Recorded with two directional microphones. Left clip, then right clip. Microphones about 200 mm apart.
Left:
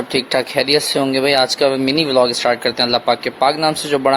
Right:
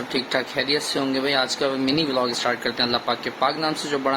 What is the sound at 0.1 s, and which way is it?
Speech, 40° left (ahead or behind).